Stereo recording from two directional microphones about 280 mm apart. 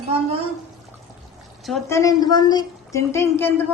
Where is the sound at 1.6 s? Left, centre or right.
Centre.